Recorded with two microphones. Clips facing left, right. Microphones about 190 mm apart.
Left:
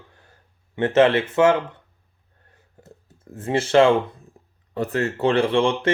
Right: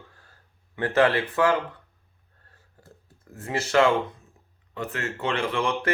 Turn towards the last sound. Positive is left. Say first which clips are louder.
# left 6 dB
turn(degrees=30)  # may be behind; listen again after turning